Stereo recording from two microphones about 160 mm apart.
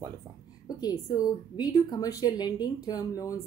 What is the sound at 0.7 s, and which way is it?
A woman's voice, 25° left (ahead or behind).